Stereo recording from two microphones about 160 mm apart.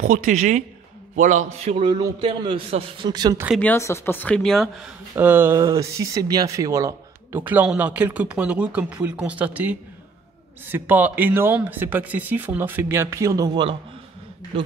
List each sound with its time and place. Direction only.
0.0 s a man's voice: 50° right (ahead or behind); by 3.3 s 25° right (ahead or behind)
3.5 s speech: 15° left (ahead or behind)
5.1 s speech: 10° right (ahead or behind)